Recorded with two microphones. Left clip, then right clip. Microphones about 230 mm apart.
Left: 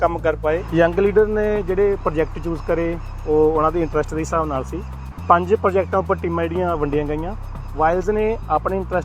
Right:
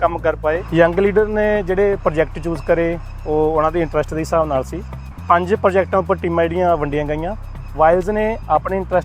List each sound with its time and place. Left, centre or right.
0.0 s speech: right